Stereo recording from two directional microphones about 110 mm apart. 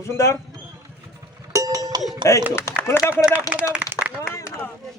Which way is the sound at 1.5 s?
30° right (ahead or behind).